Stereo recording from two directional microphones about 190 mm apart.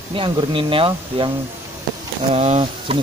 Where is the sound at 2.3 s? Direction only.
35° right (ahead or behind).